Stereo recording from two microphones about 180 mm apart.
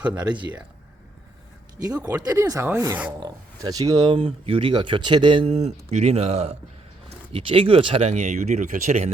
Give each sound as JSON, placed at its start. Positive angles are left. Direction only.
{"t": 0.0, "sound": "speech", "side_deg": -5}
{"t": 2.2, "sound": "speech", "side_deg": -20}